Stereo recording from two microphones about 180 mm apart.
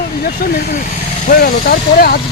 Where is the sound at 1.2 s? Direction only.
55° left (ahead or behind).